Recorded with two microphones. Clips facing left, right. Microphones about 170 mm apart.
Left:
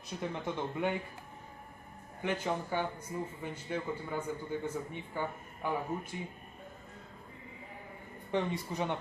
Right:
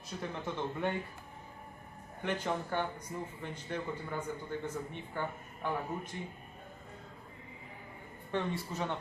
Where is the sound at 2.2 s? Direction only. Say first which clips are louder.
Left 1 dB; 10° left (ahead or behind).